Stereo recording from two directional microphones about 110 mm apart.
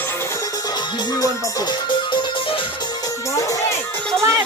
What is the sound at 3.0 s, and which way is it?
Music, 30° left (ahead or behind).